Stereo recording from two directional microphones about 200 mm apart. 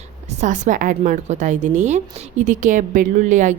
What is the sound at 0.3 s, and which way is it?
A woman's voice, 35° right (ahead or behind).